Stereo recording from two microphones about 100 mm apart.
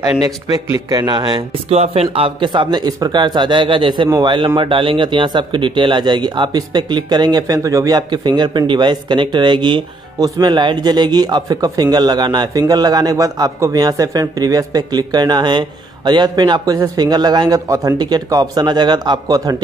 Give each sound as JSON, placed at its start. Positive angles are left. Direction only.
{"t": 0.2, "sound": "speech", "side_deg": -35}
{"t": 1.7, "sound": "speech", "side_deg": -80}
{"t": 4.6, "sound": "speech", "side_deg": -60}